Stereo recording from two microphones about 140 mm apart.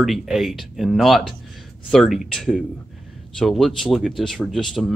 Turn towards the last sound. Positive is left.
turn(degrees=0)  # may be behind; listen again after turning